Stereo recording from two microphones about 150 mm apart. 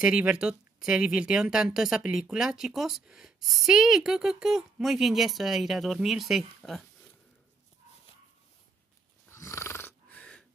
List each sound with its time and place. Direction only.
0.0 s speech: 5° right (ahead or behind)
9.3 s snoring: 20° left (ahead or behind)